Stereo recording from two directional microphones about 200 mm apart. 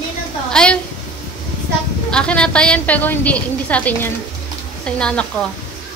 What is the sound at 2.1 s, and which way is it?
A woman's voice, 5° left (ahead or behind).